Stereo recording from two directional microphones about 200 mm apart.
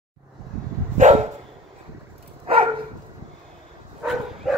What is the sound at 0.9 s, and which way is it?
Dog, 35° right (ahead or behind).